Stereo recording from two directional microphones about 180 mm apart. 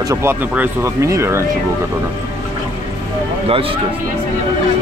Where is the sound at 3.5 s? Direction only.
30° right (ahead or behind).